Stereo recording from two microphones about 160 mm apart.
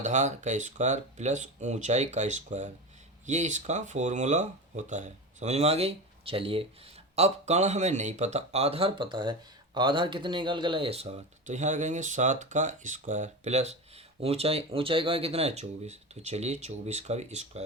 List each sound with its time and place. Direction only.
0.0 s speech: 50° right (ahead or behind)